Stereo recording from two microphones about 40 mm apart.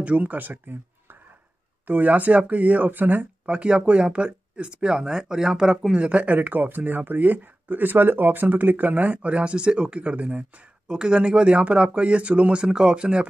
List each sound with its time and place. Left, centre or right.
0.0 s speech: right
0.4 s speech: right
1.9 s speech: right
3.4 s speech: right
5.9 s speech: right
10.9 s speech: right